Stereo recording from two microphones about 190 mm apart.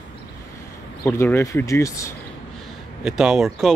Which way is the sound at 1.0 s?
15° left (ahead or behind).